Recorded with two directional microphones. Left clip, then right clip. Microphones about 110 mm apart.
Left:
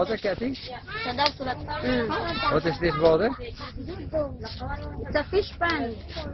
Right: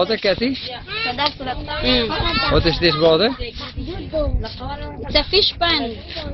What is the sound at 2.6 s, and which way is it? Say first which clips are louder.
Speech: right 8 dB; 10° right (ahead or behind).